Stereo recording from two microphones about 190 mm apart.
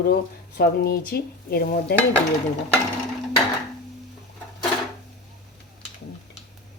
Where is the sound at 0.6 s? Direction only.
55° left (ahead or behind).